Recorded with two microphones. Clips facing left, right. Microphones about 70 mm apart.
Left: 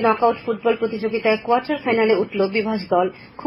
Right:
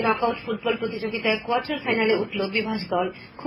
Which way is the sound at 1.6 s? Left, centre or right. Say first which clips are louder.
Left 5 dB; left.